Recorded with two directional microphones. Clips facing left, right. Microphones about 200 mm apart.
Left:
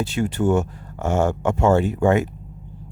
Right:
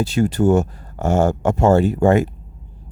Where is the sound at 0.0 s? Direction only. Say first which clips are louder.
Right 4 dB; 40° right (ahead or behind).